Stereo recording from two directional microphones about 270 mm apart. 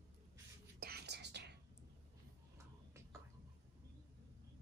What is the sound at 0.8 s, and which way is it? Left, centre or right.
Whispering, right.